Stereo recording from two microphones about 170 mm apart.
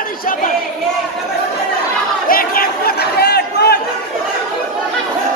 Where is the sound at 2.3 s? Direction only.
55° left (ahead or behind).